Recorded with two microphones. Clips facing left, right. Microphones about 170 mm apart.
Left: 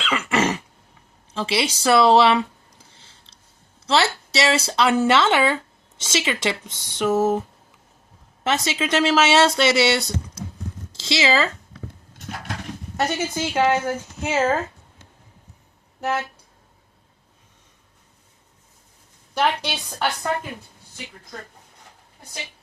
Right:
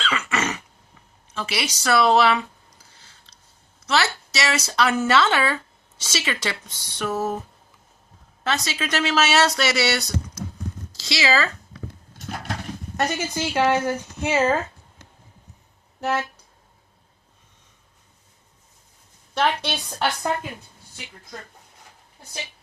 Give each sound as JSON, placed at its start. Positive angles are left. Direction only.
{"t": 0.1, "sound": "throat clearing", "side_deg": 30}
{"t": 1.3, "sound": "a sound", "side_deg": 25}
{"t": 3.8, "sound": "speech", "side_deg": 30}
{"t": 8.4, "sound": "speech", "side_deg": 25}
{"t": 13.0, "sound": "speech", "side_deg": 0}
{"t": 19.3, "sound": "a woman's voice", "side_deg": 5}